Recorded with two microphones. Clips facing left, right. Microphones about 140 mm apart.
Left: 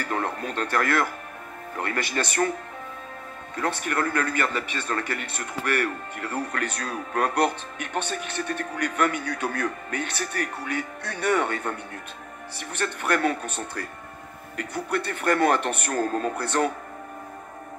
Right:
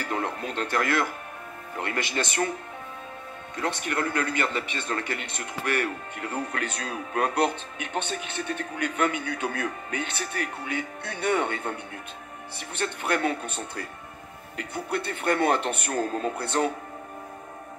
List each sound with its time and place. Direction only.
0.0 s speech: 45° left (ahead or behind)
3.6 s speech: 45° left (ahead or behind)